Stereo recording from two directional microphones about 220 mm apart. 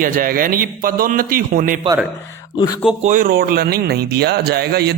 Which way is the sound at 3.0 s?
40° right (ahead or behind).